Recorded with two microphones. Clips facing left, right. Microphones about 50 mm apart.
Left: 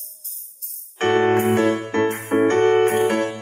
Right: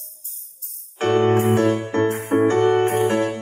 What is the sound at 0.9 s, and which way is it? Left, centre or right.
Music, left.